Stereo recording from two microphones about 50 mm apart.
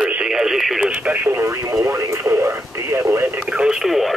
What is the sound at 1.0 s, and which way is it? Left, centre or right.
Speech, right.